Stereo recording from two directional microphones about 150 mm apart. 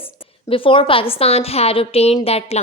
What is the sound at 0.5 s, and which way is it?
A woman's voice, 35° left (ahead or behind).